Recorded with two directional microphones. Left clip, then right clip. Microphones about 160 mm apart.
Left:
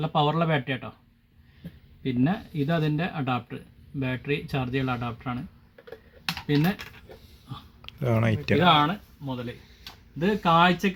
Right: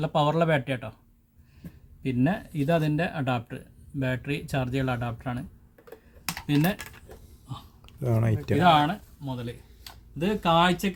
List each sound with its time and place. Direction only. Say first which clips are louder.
0.0 s speech: right 1 dB; 45° right (ahead or behind)
2.0 s speech: even; 40° right (ahead or behind)
6.6 s speech: right 1 dB; 40° right (ahead or behind)
7.8 s a sound: left 3 dB; 5° right (ahead or behind)
8.5 s speech: even; 60° right (ahead or behind)
10.2 s speech: left 2 dB; 50° right (ahead or behind)